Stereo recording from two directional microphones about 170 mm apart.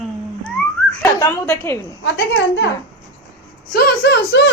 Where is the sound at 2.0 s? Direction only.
90° left.